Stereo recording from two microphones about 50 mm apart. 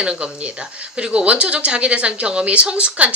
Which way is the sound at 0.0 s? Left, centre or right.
Right.